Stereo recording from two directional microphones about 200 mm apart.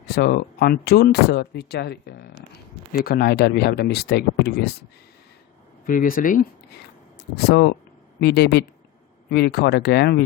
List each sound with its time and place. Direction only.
0.1 s speech: 50° left (ahead or behind)
5.8 s speech: 45° left (ahead or behind)